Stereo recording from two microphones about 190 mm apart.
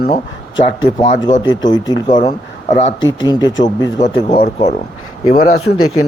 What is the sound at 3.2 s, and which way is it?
Speech, 20° left (ahead or behind).